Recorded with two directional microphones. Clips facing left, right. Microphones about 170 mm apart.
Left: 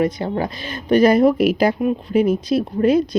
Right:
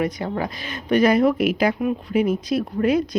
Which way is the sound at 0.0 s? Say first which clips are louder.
Left 4 dB; 30° left (ahead or behind).